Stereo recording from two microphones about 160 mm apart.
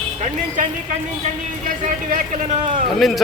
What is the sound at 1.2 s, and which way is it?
Speech, 55° right (ahead or behind).